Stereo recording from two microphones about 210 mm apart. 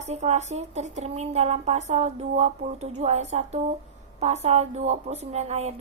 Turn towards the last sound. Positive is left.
turn(degrees=-30)  # may be behind; listen again after turning